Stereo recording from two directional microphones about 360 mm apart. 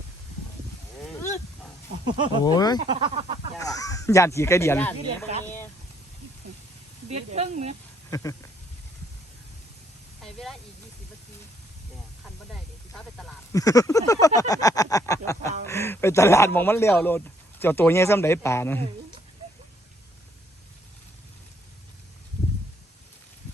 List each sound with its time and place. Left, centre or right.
2.1 s speech: centre
2.4 s speech: centre
2.8 s a sound: centre
3.6 s speech: centre
7.1 s speech: centre
8.1 s speech: centre
10.2 s a sound: centre
13.1 s speech: centre